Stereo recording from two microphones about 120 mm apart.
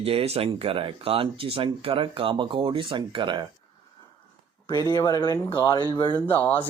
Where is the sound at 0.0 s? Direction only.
55° right (ahead or behind).